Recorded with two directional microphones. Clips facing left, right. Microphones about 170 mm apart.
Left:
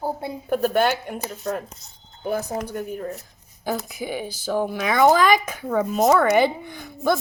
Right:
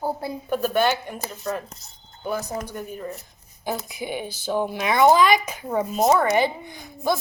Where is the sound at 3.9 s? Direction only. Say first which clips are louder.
Left 1 dB; 45° left (ahead or behind).